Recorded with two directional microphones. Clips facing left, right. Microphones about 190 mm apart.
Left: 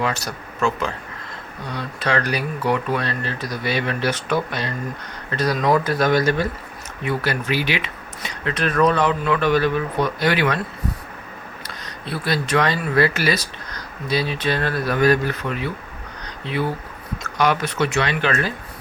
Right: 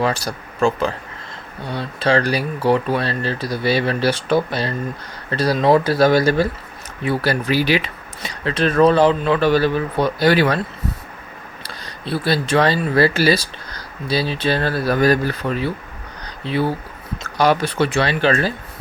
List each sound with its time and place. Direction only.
0.0 s speech: 30° right (ahead or behind)
11.7 s speech: 30° right (ahead or behind)
16.2 s a sound: 30° right (ahead or behind)
17.2 s speech: 35° right (ahead or behind)